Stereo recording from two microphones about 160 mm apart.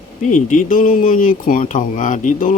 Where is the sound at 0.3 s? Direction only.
55° left (ahead or behind).